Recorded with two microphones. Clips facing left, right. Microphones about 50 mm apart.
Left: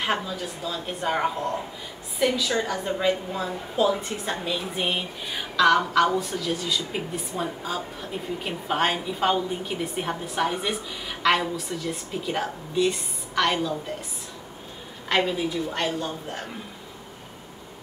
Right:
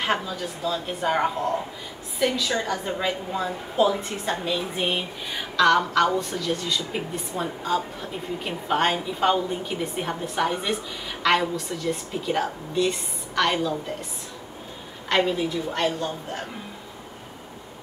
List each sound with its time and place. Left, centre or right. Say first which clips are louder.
0.0 s a woman's voice: right 1 dB; centre
15.0 s a woman's voice: right 1 dB; centre